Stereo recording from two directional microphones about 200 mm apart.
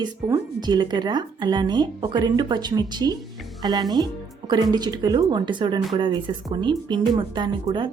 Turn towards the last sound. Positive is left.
turn(degrees=-25)  # may be behind; listen again after turning